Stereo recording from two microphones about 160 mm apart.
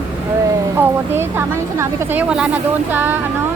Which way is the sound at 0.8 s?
15° right (ahead or behind).